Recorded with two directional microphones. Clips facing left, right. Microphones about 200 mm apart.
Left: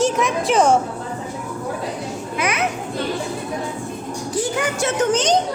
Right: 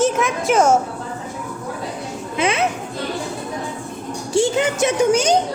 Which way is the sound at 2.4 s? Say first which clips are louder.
Right 4 dB; 25° right (ahead or behind).